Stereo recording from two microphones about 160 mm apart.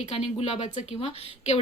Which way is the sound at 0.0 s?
40° left (ahead or behind).